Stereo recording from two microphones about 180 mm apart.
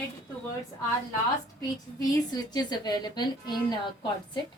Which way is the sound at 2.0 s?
20° left (ahead or behind).